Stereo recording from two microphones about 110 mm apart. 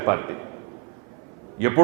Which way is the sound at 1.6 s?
25° right (ahead or behind).